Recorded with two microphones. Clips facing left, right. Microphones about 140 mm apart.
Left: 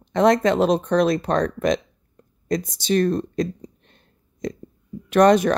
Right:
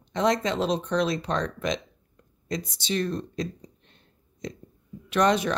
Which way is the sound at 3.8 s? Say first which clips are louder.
Left 2 dB; 50° left (ahead or behind).